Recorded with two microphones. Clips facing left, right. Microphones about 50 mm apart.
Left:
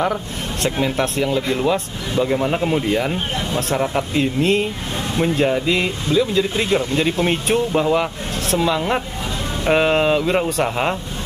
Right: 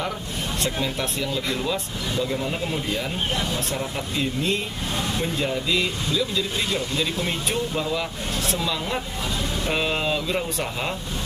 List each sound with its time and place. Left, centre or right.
0.7 s speech: left